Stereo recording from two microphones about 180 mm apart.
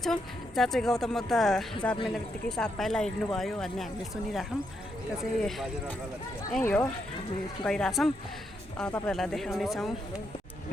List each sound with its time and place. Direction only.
0.0 s speech: centre (ahead or behind)